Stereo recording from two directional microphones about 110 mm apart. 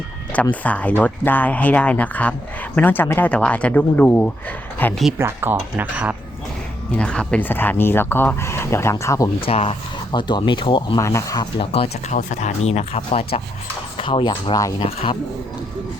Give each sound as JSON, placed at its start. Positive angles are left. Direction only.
{"t": 0.6, "sound": "speech", "side_deg": 15}
{"t": 5.1, "sound": "speech", "side_deg": -20}
{"t": 6.9, "sound": "speech", "side_deg": 10}
{"t": 9.4, "sound": "speech", "side_deg": 65}
{"t": 10.1, "sound": "speech", "side_deg": 45}
{"t": 11.0, "sound": "speech", "side_deg": 30}
{"t": 11.6, "sound": "speech", "side_deg": 60}
{"t": 14.0, "sound": "speech", "side_deg": 50}